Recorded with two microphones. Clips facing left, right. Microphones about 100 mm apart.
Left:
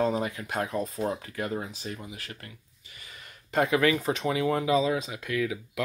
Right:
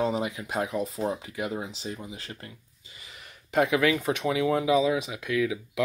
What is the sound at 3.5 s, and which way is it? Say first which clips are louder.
Speech: right 1 dB; 5° right (ahead or behind).